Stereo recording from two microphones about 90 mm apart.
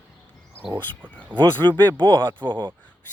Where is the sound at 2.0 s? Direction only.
65° right (ahead or behind).